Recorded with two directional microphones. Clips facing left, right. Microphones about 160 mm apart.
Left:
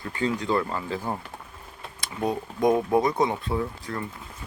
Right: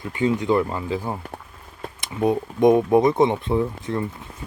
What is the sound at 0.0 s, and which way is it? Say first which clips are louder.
Speech: right 5 dB; 20° right (ahead or behind).